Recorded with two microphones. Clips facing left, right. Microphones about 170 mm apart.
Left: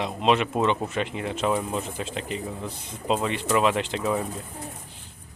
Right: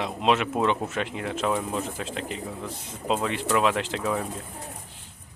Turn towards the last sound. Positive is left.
turn(degrees=0)  # may be behind; listen again after turning